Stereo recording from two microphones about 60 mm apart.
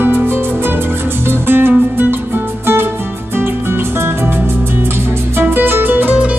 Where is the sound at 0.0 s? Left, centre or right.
Right.